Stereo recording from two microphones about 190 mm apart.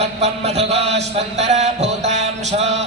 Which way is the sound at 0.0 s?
35° right (ahead or behind).